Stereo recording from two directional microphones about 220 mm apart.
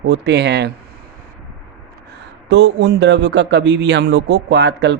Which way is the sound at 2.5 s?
50° right (ahead or behind).